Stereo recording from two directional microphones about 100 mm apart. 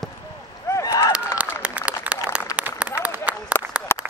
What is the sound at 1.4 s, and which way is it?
Applause, 15° right (ahead or behind).